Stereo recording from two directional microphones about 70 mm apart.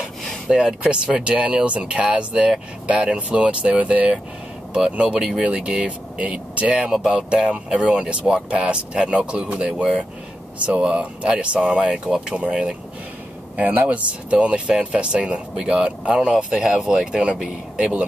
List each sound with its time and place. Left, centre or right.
0.5 s speech: centre